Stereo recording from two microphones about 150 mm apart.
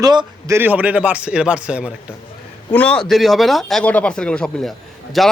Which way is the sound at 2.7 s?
10° left (ahead or behind).